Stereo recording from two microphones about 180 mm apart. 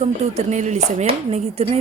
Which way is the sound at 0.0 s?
40° right (ahead or behind).